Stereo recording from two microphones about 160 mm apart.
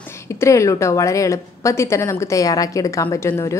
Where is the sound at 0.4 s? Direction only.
20° left (ahead or behind).